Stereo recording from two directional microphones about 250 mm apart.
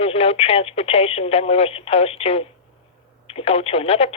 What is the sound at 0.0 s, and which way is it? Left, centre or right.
Speech, left.